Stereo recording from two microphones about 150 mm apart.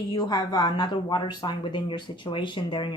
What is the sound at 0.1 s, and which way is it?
Speech, 25° left (ahead or behind).